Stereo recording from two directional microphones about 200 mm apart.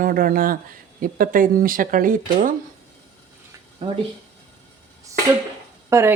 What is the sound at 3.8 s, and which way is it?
Speech, 25° right (ahead or behind).